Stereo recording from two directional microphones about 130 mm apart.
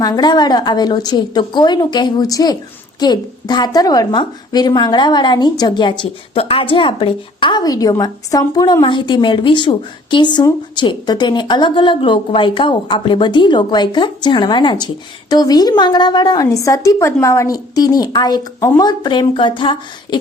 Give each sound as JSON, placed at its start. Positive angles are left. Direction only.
{"t": 0.0, "sound": "a woman's voice", "side_deg": 30}